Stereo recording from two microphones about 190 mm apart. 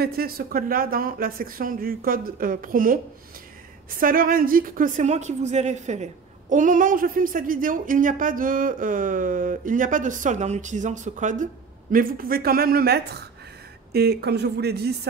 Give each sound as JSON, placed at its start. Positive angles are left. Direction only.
{"t": 0.0, "sound": "speech", "side_deg": -55}
{"t": 4.0, "sound": "a woman's voice", "side_deg": -50}